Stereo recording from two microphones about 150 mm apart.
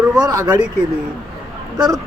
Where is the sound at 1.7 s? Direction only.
25° right (ahead or behind).